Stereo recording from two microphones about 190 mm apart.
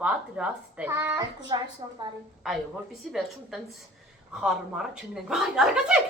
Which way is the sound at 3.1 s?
Centre (ahead or behind).